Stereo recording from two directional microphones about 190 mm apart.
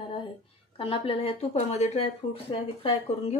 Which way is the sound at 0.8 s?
30° left (ahead or behind).